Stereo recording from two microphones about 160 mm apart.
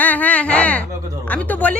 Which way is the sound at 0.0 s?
10° left (ahead or behind).